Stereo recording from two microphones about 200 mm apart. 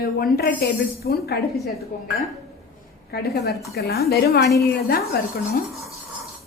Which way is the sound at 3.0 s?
50° left (ahead or behind).